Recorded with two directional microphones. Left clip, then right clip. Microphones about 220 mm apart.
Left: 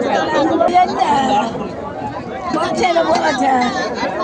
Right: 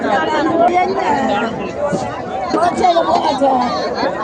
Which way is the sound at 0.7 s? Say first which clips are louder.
Left 2 dB; 40° left (ahead or behind).